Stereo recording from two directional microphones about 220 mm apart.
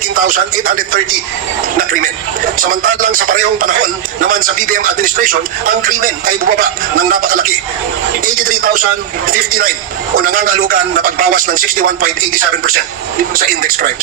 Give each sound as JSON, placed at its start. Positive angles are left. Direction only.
{"t": 0.1, "sound": "speech", "side_deg": -40}